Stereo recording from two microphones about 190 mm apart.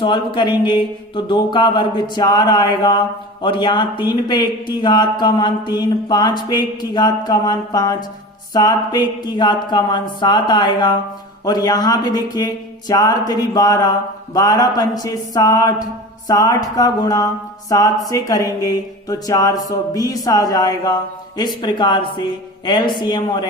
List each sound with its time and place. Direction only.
0.0 s speech: 25° left (ahead or behind)